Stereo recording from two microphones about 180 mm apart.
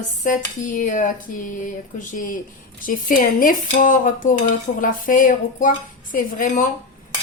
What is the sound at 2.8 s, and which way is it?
Speech, 50° left (ahead or behind).